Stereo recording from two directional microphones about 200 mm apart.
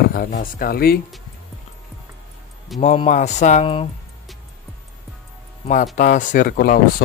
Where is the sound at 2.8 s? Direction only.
35° left (ahead or behind).